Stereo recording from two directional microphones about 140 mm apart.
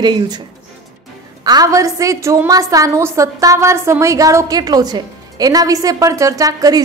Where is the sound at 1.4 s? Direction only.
25° right (ahead or behind).